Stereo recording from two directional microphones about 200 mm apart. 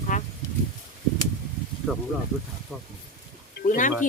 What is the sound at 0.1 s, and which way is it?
Insect, 40° left (ahead or behind).